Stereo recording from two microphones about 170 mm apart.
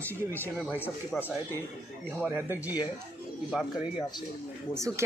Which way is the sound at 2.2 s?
10° right (ahead or behind).